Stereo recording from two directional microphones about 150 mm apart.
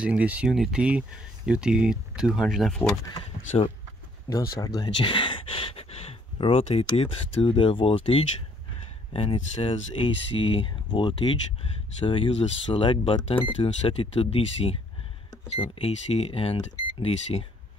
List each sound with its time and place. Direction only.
0.0 s speech: 10° right (ahead or behind)
3.2 s speech: 40° left (ahead or behind)
4.6 s speech: 25° left (ahead or behind)